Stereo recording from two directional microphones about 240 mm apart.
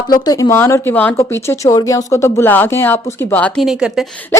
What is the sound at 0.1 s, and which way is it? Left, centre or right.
Speech, centre.